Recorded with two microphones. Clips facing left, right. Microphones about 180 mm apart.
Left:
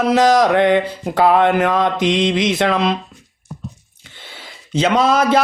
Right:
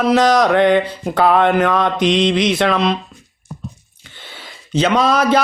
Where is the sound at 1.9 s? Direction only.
25° right (ahead or behind).